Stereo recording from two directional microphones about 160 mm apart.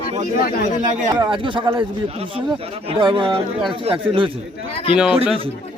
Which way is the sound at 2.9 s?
30° right (ahead or behind).